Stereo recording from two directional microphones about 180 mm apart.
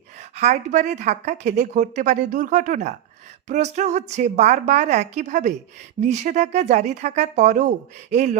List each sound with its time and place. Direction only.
0.2 s a woman's voice: 40° right (ahead or behind)